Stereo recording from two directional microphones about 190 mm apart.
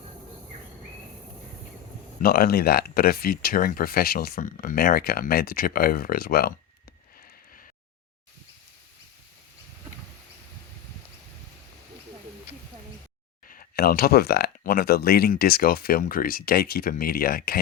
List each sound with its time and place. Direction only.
2.2 s speech: 50° left (ahead or behind)
13.5 s speech: 50° left (ahead or behind)